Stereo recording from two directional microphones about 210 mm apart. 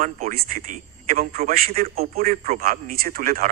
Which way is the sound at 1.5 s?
45° right (ahead or behind).